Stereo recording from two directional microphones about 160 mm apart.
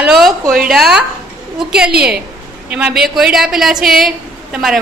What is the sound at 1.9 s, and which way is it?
Speech, 80° right.